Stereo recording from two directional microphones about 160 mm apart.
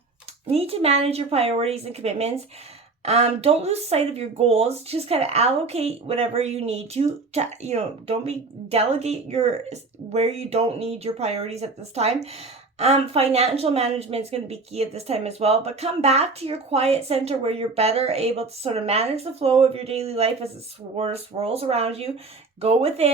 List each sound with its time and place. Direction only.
0.4 s speech: 40° right (ahead or behind)